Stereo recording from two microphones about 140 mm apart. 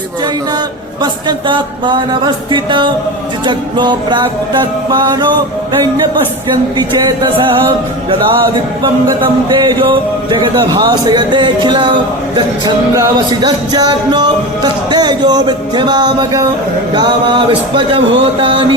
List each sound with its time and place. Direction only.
1.0 s music: 35° right (ahead or behind)
6.7 s music: 30° right (ahead or behind)
9.5 s music: 30° right (ahead or behind)